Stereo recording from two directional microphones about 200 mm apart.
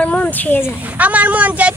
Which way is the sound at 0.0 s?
5° left (ahead or behind).